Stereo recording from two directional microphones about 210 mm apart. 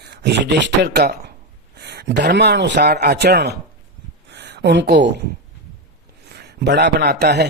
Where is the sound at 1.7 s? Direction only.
55° right (ahead or behind).